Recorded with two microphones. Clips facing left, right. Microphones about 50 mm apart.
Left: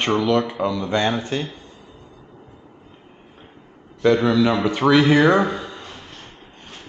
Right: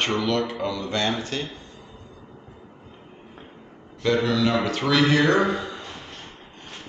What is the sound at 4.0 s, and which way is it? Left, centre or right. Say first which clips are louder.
Speech: left 5 dB; centre.